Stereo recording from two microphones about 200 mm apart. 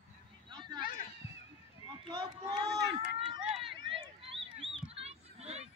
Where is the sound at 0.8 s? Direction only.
45° left (ahead or behind).